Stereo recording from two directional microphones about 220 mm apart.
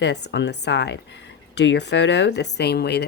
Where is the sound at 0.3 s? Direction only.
50° left (ahead or behind).